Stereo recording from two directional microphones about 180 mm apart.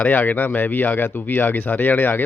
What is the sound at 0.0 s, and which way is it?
Speech, 10° left (ahead or behind).